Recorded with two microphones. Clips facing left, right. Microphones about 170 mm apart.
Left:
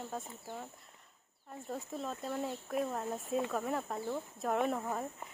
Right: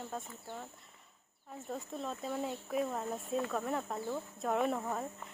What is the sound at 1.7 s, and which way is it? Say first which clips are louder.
Speech: even; centre (ahead or behind).